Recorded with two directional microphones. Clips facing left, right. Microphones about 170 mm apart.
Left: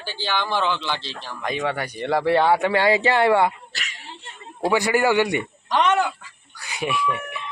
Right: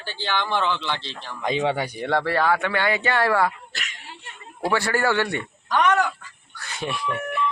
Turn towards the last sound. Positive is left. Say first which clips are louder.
# left 1 dB
turn(degrees=-45)  # may be behind; listen again after turning